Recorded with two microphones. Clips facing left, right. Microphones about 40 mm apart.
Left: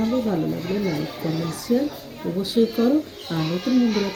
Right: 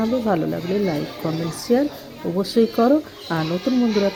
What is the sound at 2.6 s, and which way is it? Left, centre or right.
Speech, right.